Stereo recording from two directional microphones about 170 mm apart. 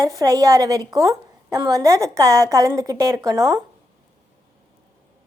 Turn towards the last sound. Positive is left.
turn(degrees=-20)  # may be behind; listen again after turning